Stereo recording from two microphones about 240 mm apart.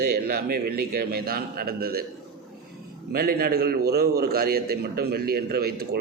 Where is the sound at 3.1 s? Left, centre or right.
Right.